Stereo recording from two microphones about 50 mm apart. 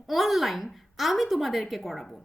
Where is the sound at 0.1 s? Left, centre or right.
Centre.